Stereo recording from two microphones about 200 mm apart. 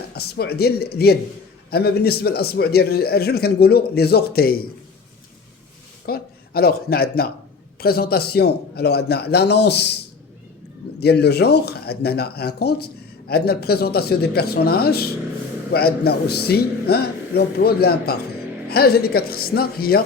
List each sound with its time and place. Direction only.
0.1 s speech: 50° left (ahead or behind)
6.1 s speech: 50° left (ahead or behind)
11.0 s speech: 55° left (ahead or behind)